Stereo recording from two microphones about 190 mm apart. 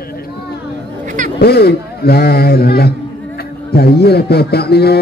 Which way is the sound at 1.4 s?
55° left (ahead or behind).